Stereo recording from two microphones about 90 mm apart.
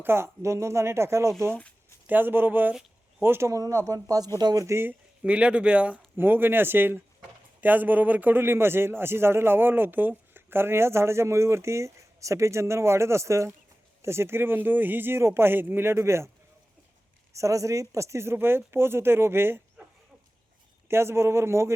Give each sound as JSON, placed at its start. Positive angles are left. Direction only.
{"t": 0.0, "sound": "a man's voice", "side_deg": -25}
{"t": 4.6, "sound": "a man's voice", "side_deg": -30}
{"t": 5.2, "sound": "a man's voice", "side_deg": -15}
{"t": 17.3, "sound": "a man's voice", "side_deg": -35}
{"t": 20.8, "sound": "a man's voice", "side_deg": -30}